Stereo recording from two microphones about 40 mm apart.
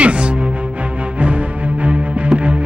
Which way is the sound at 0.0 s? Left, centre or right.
Right.